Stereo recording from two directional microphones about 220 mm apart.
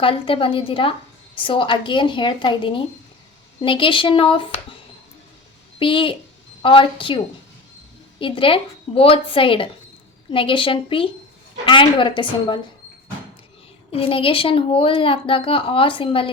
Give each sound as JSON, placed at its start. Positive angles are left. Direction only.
{"t": 0.0, "sound": "a woman's voice", "side_deg": 25}
{"t": 5.8, "sound": "a woman's voice", "side_deg": 25}
{"t": 8.2, "sound": "a woman's voice", "side_deg": 25}
{"t": 13.9, "sound": "a woman's voice", "side_deg": 25}